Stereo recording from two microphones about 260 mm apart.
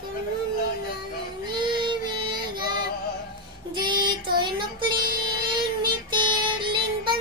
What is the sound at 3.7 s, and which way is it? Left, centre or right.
Female singing, centre.